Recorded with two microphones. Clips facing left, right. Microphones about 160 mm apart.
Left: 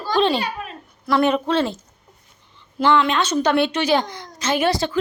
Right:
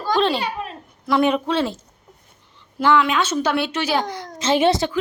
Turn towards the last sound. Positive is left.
turn(degrees=-25)  # may be behind; listen again after turning